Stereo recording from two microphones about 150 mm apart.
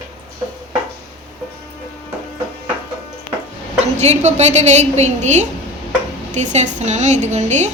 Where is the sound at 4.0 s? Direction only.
50° right (ahead or behind).